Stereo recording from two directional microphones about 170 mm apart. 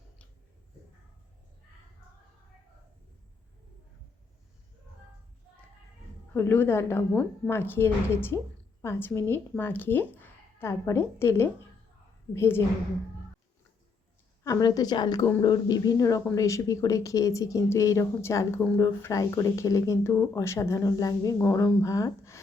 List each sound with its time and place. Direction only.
6.3 s speech: 15° left (ahead or behind)
14.4 s speech: 20° left (ahead or behind)